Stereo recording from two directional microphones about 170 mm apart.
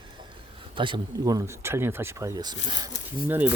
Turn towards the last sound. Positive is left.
turn(degrees=-10)  # may be behind; listen again after turning